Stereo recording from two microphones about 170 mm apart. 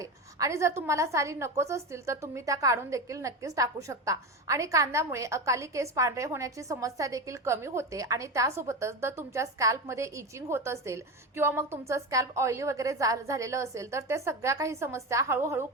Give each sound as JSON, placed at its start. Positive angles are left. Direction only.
{"t": 0.0, "sound": "a woman's voice", "side_deg": -20}